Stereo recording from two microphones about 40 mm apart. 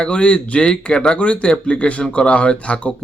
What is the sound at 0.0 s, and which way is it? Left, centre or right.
Speech, left.